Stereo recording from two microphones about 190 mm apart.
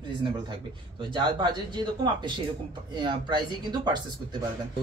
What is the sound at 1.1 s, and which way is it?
Speech, 25° right (ahead or behind).